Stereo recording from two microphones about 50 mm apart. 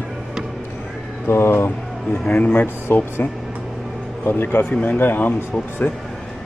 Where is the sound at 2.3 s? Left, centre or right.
Left.